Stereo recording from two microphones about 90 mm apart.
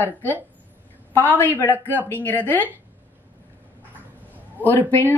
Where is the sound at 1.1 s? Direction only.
20° left (ahead or behind).